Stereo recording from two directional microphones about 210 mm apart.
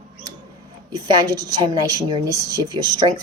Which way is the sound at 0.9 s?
20° right (ahead or behind).